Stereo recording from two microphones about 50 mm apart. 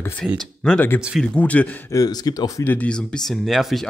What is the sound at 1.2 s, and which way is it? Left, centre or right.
Speech, left.